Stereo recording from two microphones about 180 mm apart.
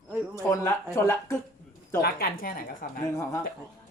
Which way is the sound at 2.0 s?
55° left (ahead or behind).